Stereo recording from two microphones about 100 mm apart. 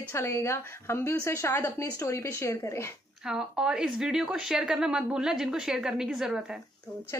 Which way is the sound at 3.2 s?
5° right (ahead or behind).